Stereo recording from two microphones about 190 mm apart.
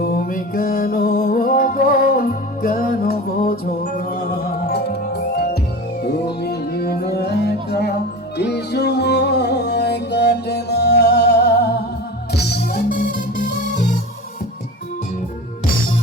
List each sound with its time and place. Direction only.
0.0 s music: 50° left (ahead or behind)